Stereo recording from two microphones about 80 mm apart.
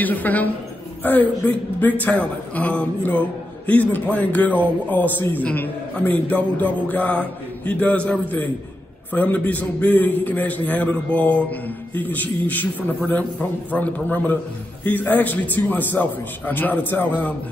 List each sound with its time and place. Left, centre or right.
0.0 s a man's voice: left